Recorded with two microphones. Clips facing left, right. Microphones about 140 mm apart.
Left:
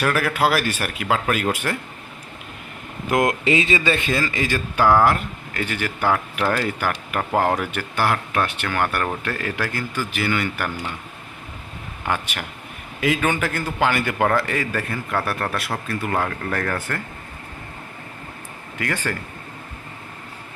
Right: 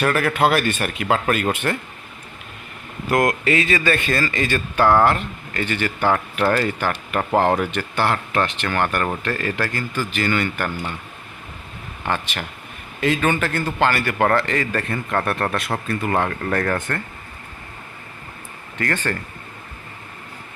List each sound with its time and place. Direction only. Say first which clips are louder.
0.0 s a man's voice: right 2 dB; 5° left (ahead or behind)
3.2 s a man's voice: even; 25° left (ahead or behind)
12.0 s a man's voice: right 1 dB; 10° left (ahead or behind)
18.8 s speech: right 2 dB; 10° left (ahead or behind)